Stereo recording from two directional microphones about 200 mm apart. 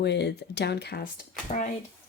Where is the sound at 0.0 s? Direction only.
60° left (ahead or behind); by 1.7 s 40° left (ahead or behind).